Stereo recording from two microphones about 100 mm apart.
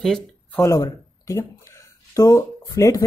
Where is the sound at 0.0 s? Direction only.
Centre (ahead or behind).